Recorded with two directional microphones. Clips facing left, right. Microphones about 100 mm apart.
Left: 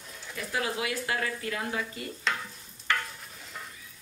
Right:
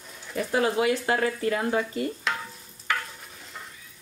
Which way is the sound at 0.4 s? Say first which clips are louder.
Right 8 dB; 35° right (ahead or behind).